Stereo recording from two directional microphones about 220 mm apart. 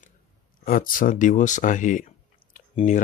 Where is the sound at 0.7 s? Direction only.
40° left (ahead or behind).